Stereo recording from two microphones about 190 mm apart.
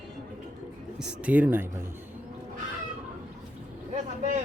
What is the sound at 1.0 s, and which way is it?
Speech, 5° right (ahead or behind).